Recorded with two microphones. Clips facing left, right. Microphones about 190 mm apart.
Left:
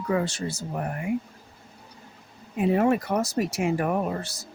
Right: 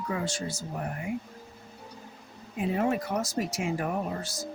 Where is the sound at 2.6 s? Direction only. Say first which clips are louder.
Left 6 dB; 60° left (ahead or behind).